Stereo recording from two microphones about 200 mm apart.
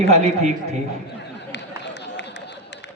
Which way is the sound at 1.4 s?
60° left (ahead or behind).